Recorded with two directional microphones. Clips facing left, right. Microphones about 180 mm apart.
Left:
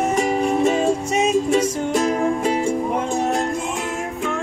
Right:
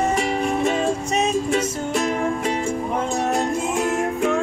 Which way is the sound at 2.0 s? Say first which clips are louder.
Left 2 dB; 30° left (ahead or behind).